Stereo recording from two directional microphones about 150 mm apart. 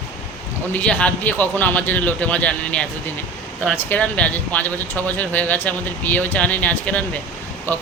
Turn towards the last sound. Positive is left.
turn(degrees=10)  # may be behind; listen again after turning